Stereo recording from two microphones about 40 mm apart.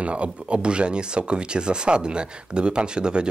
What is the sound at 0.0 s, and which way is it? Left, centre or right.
Speech, right.